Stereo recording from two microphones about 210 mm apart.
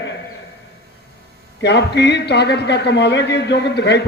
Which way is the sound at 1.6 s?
55° left (ahead or behind).